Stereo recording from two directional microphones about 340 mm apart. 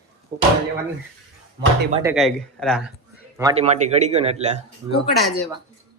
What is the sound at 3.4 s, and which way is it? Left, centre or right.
A man's voice, centre.